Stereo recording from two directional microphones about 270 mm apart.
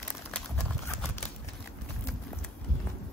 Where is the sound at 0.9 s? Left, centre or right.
Centre.